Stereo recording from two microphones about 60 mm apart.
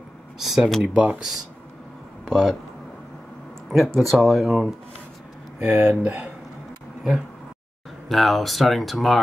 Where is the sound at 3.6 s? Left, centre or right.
Centre.